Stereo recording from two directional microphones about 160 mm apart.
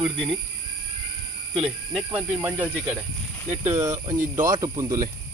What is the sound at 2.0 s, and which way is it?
Speech, 10° right (ahead or behind).